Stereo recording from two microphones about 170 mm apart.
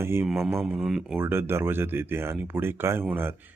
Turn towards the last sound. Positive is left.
turn(degrees=-15)  # may be behind; listen again after turning